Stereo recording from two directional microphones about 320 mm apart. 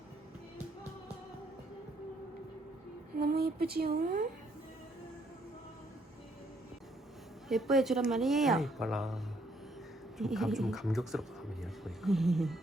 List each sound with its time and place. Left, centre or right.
3.2 s speech: right
7.4 s speech: centre